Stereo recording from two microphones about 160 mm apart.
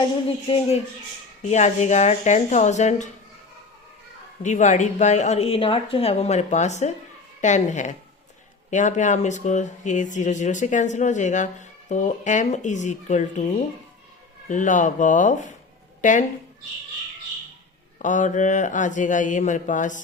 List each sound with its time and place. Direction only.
0.4 s speech: 30° left (ahead or behind)
1.4 s speech: 45° left (ahead or behind)
4.4 s speech: 50° left (ahead or behind)
14.4 s a woman's voice: 50° left (ahead or behind)
18.0 s speech: 50° left (ahead or behind)